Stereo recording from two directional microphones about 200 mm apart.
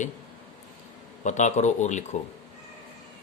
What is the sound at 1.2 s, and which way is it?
Speech, 35° left (ahead or behind).